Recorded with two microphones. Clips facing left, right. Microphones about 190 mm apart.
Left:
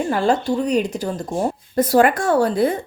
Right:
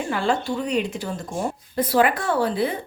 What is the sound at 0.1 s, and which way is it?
Speech, 40° left (ahead or behind).